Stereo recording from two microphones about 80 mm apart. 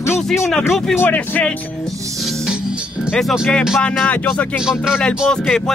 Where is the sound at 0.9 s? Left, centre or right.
Left.